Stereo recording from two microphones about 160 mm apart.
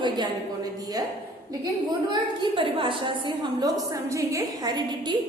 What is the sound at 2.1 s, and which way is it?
A woman's voice, 30° right (ahead or behind).